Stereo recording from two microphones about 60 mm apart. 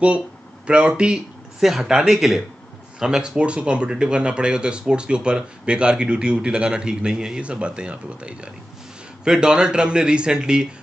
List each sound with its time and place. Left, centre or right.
0.7 s speech: centre